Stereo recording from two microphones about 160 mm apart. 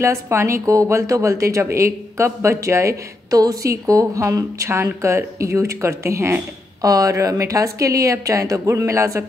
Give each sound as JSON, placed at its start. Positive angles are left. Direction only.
{"t": 0.0, "sound": "a woman's voice", "side_deg": -15}